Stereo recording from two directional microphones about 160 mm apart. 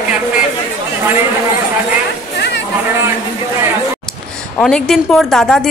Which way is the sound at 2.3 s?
90° left.